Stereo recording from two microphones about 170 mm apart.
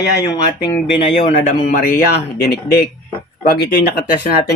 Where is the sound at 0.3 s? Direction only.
20° left (ahead or behind).